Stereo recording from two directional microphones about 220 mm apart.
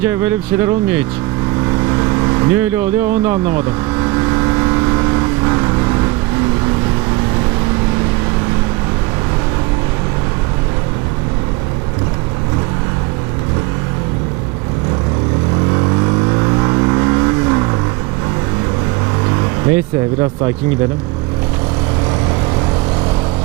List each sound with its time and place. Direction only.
0.0 s speech: 10° right (ahead or behind)
1.6 s vehicle: 15° right (ahead or behind)
15.7 s vehicle: 20° right (ahead or behind)
19.2 s vehicle: 15° right (ahead or behind)